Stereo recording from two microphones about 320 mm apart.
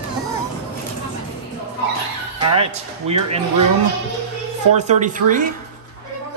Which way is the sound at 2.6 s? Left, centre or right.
Centre.